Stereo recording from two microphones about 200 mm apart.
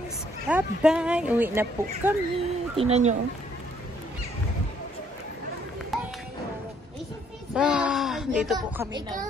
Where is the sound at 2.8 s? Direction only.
30° right (ahead or behind).